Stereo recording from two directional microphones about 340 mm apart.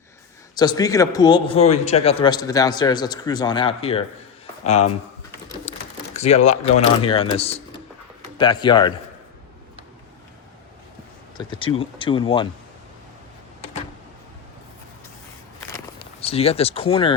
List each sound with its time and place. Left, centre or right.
0.5 s a man's voice: centre
6.1 s a man's voice: centre
11.3 s a man's voice: centre
16.2 s a man's voice: centre